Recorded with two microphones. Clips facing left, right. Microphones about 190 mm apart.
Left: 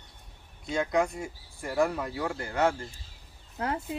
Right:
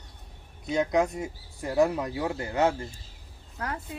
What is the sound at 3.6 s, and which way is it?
Speech, 25° left (ahead or behind).